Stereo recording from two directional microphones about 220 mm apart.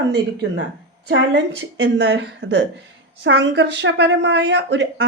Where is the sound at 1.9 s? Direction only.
50° right (ahead or behind).